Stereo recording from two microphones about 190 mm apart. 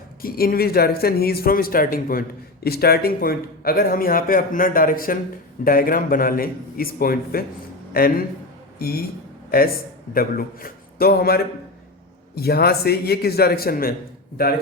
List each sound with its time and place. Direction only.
0.2 s a man's voice: 50° left (ahead or behind)